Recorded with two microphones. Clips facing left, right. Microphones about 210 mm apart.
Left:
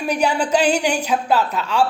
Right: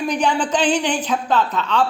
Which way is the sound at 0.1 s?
10° left (ahead or behind).